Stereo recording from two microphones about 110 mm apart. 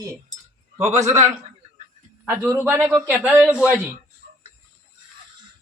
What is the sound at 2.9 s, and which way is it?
Speech, 15° right (ahead or behind).